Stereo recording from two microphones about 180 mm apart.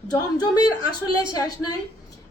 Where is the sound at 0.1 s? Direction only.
20° left (ahead or behind).